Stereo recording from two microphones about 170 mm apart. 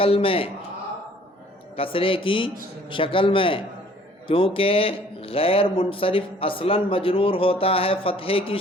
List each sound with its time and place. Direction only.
0.0 s speech: 35° left (ahead or behind)
1.7 s speech: 35° left (ahead or behind)